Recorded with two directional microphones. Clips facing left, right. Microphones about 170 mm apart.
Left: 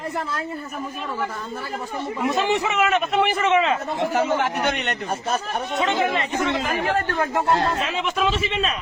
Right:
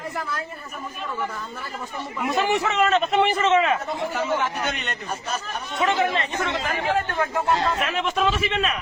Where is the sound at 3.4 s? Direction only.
15° left (ahead or behind).